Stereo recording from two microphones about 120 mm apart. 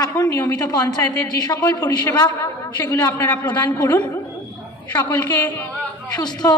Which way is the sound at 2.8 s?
15° left (ahead or behind).